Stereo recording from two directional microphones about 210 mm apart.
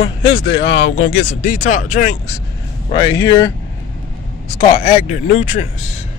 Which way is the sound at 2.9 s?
20° left (ahead or behind).